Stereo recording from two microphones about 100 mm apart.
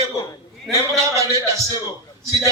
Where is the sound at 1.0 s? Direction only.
30° right (ahead or behind).